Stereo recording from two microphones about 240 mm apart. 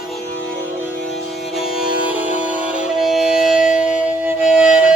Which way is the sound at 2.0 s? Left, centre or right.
Centre.